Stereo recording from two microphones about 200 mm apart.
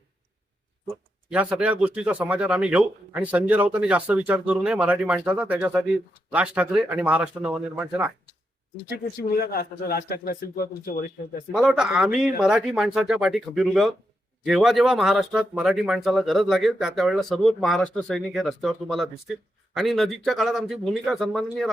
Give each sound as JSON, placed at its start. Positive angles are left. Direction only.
{"t": 1.3, "sound": "speech", "side_deg": -5}
{"t": 8.9, "sound": "a man's voice", "side_deg": 50}
{"t": 11.5, "sound": "speech", "side_deg": 0}